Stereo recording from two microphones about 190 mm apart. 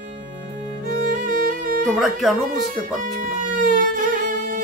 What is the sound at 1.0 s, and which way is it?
Music, 45° right (ahead or behind).